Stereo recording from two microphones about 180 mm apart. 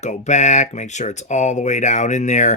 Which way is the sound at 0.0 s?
40° left (ahead or behind).